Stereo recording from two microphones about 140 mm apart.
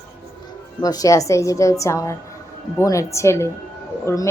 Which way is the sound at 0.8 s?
25° left (ahead or behind).